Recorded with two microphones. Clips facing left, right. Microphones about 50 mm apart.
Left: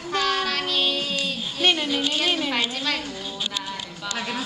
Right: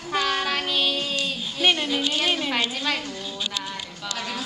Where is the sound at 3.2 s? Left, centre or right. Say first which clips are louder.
Even; centre.